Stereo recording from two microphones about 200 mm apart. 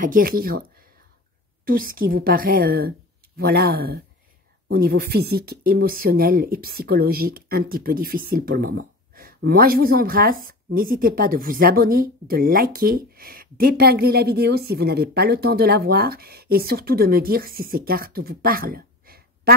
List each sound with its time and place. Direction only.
0.0 s speech: 45° right (ahead or behind)
1.7 s speech: 45° right (ahead or behind)